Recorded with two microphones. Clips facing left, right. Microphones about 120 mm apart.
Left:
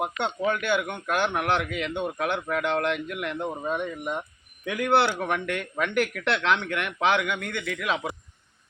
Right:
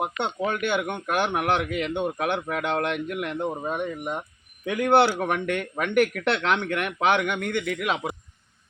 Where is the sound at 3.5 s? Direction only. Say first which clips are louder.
Even; 15° right (ahead or behind).